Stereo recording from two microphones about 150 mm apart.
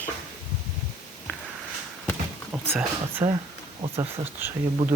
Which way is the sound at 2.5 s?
15° right (ahead or behind).